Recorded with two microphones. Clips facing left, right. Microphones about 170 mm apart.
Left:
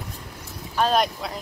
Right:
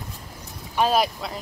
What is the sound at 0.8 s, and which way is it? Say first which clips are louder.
Speech: even; 5° right (ahead or behind).